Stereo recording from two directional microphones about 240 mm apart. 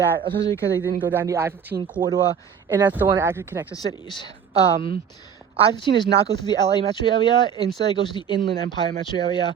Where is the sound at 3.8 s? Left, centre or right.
Centre.